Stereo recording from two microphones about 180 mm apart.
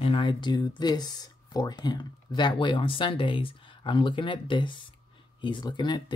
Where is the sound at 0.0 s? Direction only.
30° left (ahead or behind).